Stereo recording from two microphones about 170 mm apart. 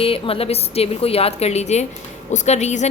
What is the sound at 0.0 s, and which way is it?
A woman's voice, 35° left (ahead or behind).